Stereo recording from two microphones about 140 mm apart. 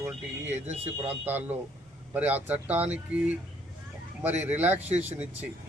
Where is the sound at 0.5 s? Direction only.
50° right (ahead or behind).